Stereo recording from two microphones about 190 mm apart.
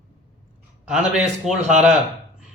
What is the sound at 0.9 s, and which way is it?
A man's voice, centre (ahead or behind).